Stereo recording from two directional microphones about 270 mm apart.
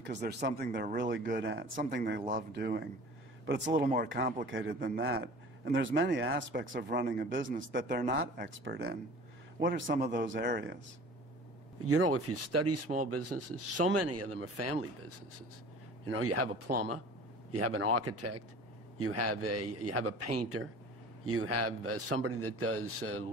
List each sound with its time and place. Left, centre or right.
0.0 s speech: right
4.7 s speech: right
5.0 s speech: right
11.8 s speech: right
16.6 s speech: right
17.5 s a man's voice: right